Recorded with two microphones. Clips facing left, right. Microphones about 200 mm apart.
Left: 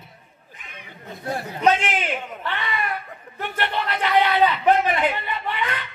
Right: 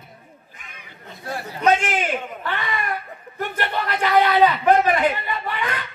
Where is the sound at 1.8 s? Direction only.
45° right (ahead or behind).